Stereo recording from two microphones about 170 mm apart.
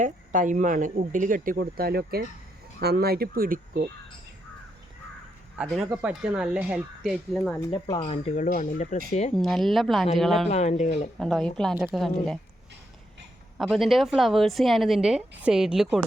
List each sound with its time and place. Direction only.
0.0 s speech: 50° right (ahead or behind)
5.6 s speech: centre (ahead or behind)
7.7 s speech: 30° left (ahead or behind)
9.3 s speech: centre (ahead or behind)
10.5 s speech: 40° left (ahead or behind)
11.2 s speech: 5° left (ahead or behind)
13.6 s speech: centre (ahead or behind)